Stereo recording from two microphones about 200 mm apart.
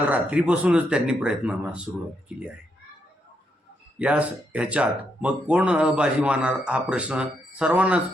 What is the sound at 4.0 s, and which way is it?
A man's voice, 5° right (ahead or behind).